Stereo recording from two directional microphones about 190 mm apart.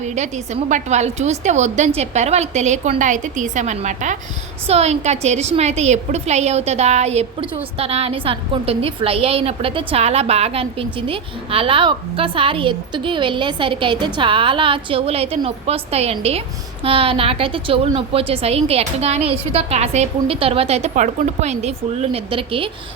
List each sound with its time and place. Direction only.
0.0 s a woman's voice: 35° right (ahead or behind)